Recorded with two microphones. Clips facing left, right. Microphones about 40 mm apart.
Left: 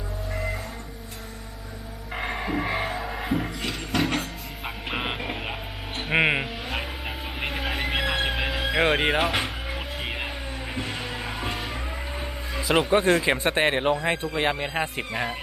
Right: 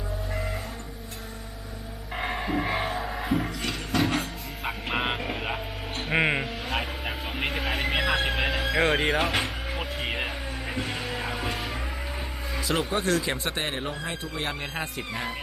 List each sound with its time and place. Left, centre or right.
0.3 s music: centre
2.1 s music: centre
5.2 s a sound: centre
6.0 s speech: centre
6.7 s vehicle: centre
9.2 s music: centre
12.5 s music: centre
12.9 s speech: left
14.6 s speech: centre